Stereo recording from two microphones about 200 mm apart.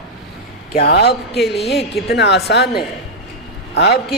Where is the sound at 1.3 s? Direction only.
Centre (ahead or behind).